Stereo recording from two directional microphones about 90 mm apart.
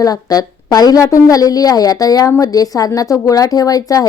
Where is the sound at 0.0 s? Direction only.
45° left (ahead or behind).